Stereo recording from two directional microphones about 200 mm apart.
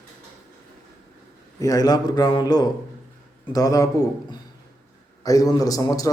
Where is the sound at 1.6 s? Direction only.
20° left (ahead or behind).